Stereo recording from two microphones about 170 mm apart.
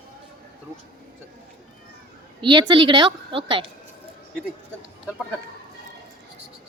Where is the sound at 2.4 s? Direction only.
25° right (ahead or behind).